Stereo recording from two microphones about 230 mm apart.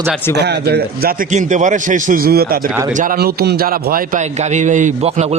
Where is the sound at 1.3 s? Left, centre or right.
Right.